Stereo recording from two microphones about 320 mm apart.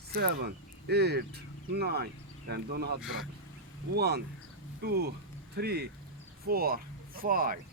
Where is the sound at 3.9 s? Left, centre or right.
Right.